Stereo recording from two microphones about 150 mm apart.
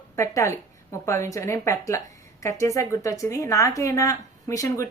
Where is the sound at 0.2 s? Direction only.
20° left (ahead or behind).